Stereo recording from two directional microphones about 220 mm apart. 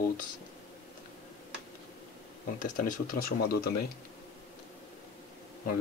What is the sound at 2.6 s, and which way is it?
Speech, 35° left (ahead or behind).